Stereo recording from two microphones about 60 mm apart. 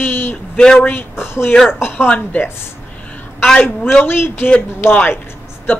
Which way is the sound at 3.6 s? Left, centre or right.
Left.